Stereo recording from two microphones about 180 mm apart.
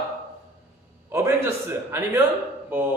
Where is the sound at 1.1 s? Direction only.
15° right (ahead or behind).